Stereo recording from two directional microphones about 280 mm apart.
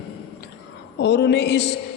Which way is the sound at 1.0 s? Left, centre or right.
Left.